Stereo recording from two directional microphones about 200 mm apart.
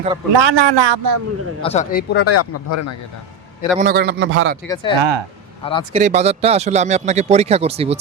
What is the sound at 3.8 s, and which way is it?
Speech, 50° right (ahead or behind).